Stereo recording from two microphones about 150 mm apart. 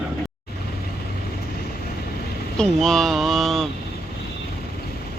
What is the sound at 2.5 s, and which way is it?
Speech, 5° left (ahead or behind).